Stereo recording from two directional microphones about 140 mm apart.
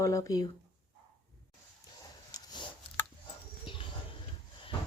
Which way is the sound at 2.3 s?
30° left (ahead or behind).